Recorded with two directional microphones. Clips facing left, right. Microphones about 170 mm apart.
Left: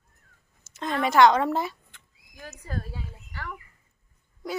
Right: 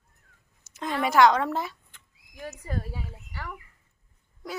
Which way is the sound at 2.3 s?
15° right (ahead or behind).